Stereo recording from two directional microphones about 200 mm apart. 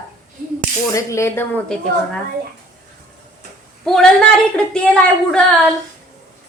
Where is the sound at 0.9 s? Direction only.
15° left (ahead or behind).